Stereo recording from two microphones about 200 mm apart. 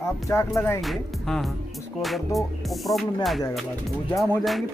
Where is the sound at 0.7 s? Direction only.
Centre (ahead or behind).